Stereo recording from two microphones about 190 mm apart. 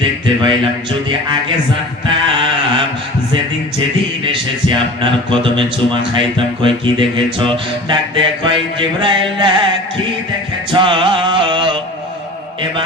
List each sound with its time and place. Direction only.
0.0 s music: 25° right (ahead or behind)
2.0 s a sound: 25° right (ahead or behind)
3.8 s music: 25° right (ahead or behind)
10.7 s mantra: 25° right (ahead or behind)